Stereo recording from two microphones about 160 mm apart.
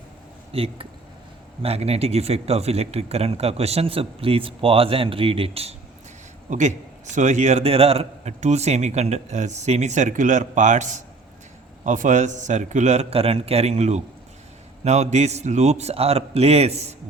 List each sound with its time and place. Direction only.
0.5 s speech: 35° right (ahead or behind)
6.5 s a man's voice: 50° right (ahead or behind)